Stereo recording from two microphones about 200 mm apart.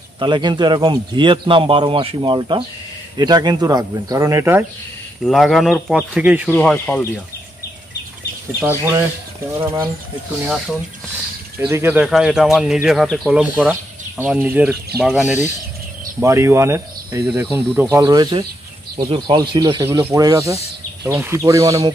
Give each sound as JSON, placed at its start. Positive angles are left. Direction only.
{"t": 0.2, "sound": "speech", "side_deg": -25}
{"t": 5.2, "sound": "speech", "side_deg": 0}
{"t": 6.5, "sound": "speech", "side_deg": 5}
{"t": 9.6, "sound": "speech", "side_deg": -15}
{"t": 10.4, "sound": "speech", "side_deg": -5}